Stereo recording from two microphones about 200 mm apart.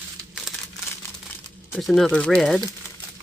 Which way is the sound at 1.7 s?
Centre (ahead or behind).